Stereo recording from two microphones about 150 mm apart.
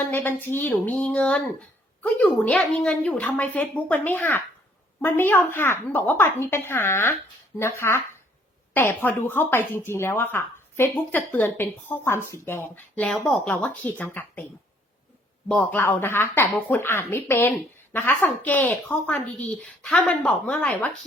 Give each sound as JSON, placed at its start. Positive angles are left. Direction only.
{"t": 0.1, "sound": "speech", "side_deg": 15}
{"t": 13.1, "sound": "speech", "side_deg": 0}
{"t": 15.4, "sound": "speech", "side_deg": 10}